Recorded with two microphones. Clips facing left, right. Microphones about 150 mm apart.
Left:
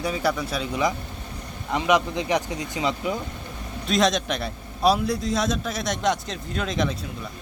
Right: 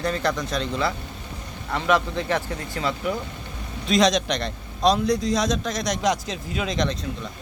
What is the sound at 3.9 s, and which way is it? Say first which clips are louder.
A man's voice: right 2 dB; centre (ahead or behind).